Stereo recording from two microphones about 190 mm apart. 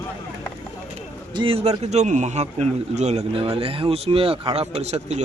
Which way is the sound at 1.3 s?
25° right (ahead or behind).